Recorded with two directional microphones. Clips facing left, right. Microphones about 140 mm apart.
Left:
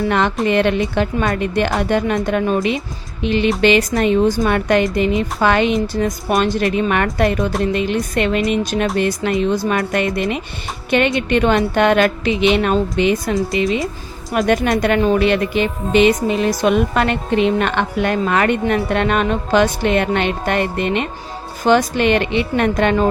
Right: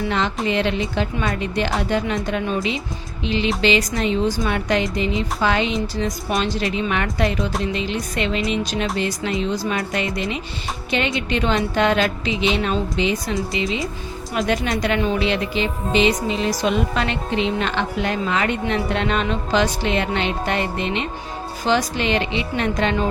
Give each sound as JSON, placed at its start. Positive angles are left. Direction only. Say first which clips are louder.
{"t": 0.1, "sound": "a woman's voice", "louder": "left 5 dB", "side_deg": 55}